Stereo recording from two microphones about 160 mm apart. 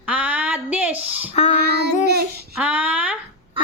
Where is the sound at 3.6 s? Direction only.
35° right (ahead or behind).